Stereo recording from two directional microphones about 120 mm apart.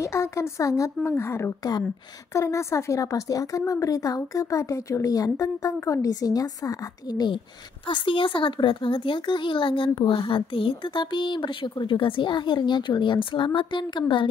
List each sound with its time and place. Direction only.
0.0 s a woman's voice: 25° left (ahead or behind)
7.9 s speech: 45° left (ahead or behind)